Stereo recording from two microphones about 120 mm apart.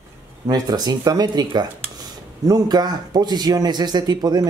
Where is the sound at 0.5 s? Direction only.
35° right (ahead or behind).